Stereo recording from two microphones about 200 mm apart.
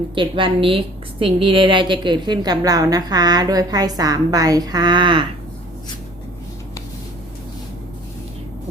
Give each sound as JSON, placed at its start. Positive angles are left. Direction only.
{"t": 0.1, "sound": "a woman's voice", "side_deg": -25}